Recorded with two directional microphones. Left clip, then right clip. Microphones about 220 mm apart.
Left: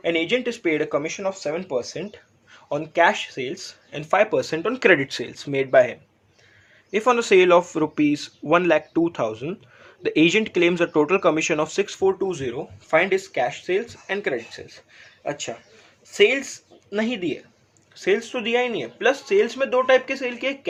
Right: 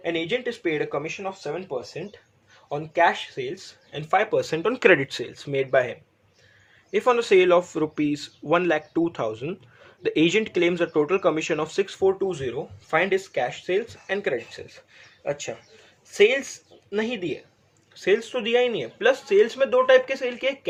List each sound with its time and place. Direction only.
0.0 s speech: 25° left (ahead or behind)
4.4 s speech: centre (ahead or behind)